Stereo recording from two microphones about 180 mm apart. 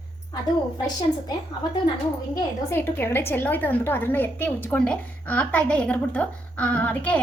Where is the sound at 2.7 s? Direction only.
10° left (ahead or behind).